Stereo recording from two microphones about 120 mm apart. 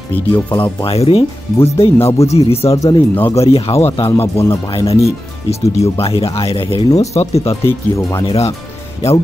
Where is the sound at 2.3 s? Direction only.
55° left (ahead or behind).